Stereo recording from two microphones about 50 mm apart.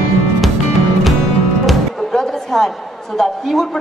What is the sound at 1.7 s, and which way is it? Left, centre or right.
A woman's voice, centre.